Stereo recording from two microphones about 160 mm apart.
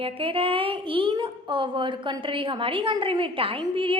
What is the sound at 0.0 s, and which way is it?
A woman's voice, 35° right (ahead or behind).